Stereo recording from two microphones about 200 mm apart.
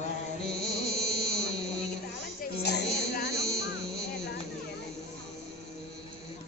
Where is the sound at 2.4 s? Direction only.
55° left (ahead or behind).